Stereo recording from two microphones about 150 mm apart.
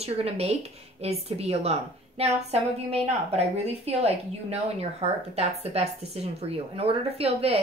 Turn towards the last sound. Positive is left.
turn(degrees=-45)  # may be behind; listen again after turning